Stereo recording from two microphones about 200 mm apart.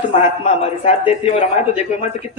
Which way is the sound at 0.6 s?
30° left (ahead or behind).